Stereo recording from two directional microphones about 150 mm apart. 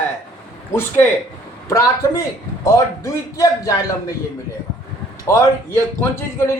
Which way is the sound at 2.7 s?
20° left (ahead or behind).